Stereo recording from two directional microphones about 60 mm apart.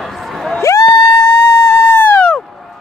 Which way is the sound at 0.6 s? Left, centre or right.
Left.